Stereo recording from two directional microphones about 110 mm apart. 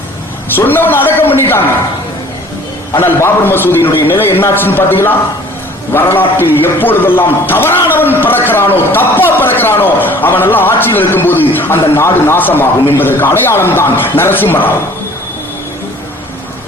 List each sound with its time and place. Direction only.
0.5 s a man's voice: 20° left (ahead or behind)
2.9 s a man's voice: 20° left (ahead or behind)